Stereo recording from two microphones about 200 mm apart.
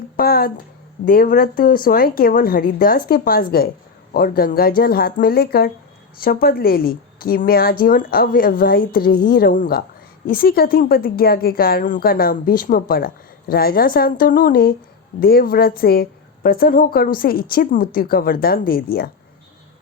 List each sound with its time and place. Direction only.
0.2 s a woman's voice: 50° left (ahead or behind)